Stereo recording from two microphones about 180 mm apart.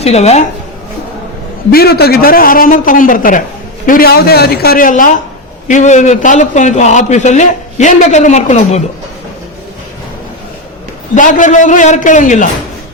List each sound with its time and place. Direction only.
0.0 s a man's voice: 35° left (ahead or behind)
1.7 s a man's voice: 60° left (ahead or behind); by 8.8 s 40° left (ahead or behind)
11.1 s a man's voice: 45° left (ahead or behind)